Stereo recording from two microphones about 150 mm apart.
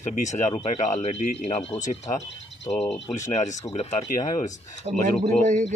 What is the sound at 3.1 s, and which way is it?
Speech, 55° left (ahead or behind).